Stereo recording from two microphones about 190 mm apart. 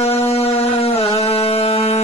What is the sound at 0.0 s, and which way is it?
Music, 30° left (ahead or behind).